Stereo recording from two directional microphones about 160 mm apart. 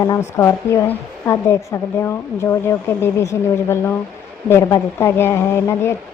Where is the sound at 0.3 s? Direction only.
20° left (ahead or behind).